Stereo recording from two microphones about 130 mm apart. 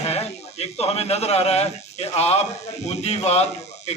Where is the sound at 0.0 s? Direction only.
55° left (ahead or behind).